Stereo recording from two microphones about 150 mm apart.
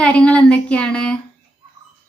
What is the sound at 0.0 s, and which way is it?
Speech, 10° left (ahead or behind).